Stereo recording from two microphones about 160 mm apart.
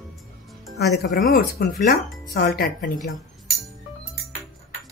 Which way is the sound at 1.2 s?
70° left (ahead or behind).